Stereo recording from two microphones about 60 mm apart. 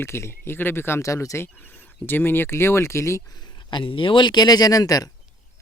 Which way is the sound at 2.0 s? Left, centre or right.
Left.